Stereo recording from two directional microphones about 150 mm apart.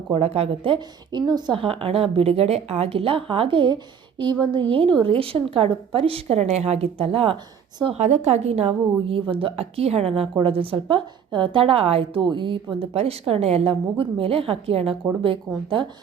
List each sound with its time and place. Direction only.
0.1 s a woman's voice: 45° right (ahead or behind)